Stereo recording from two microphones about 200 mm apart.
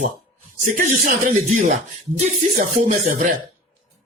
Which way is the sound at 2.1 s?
35° right (ahead or behind).